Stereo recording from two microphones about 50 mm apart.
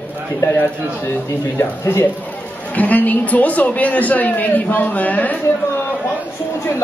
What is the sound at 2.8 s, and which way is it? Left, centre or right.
A man's voice, left.